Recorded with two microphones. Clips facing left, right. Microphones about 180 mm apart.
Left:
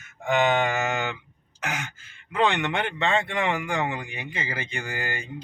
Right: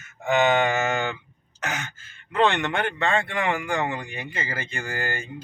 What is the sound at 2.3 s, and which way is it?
Speech, 15° left (ahead or behind).